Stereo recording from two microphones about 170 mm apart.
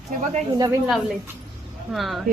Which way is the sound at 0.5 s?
20° right (ahead or behind).